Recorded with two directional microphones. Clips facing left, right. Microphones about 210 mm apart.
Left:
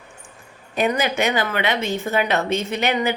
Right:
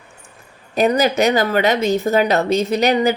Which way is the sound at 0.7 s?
40° right (ahead or behind).